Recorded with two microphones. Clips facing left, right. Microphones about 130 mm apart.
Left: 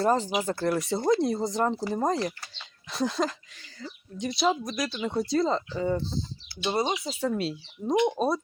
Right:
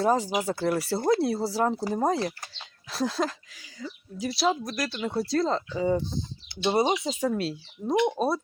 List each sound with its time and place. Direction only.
0.0 s speech: 10° right (ahead or behind)
6.6 s speech: 20° right (ahead or behind)
7.3 s speech: centre (ahead or behind)